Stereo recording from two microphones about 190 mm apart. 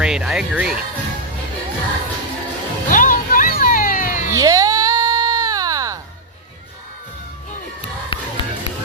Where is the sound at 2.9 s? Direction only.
45° left (ahead or behind).